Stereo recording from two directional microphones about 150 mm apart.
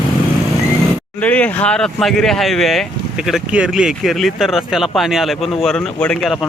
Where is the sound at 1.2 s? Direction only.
10° left (ahead or behind).